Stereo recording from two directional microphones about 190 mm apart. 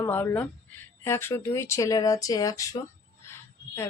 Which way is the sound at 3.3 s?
15° left (ahead or behind).